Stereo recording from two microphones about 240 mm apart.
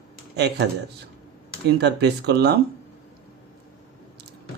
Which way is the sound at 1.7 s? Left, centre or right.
Right.